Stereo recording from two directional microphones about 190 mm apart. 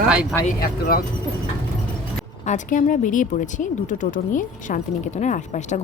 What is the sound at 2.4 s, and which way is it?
Speech, 40° left (ahead or behind).